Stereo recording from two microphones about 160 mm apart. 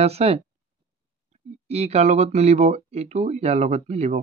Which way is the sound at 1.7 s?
40° right (ahead or behind).